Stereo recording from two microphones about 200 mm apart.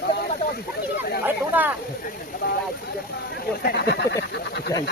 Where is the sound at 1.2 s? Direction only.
10° right (ahead or behind).